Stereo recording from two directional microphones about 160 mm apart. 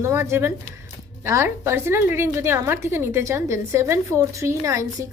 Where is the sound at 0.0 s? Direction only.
15° right (ahead or behind).